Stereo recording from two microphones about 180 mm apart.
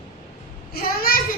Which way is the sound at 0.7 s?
55° left (ahead or behind).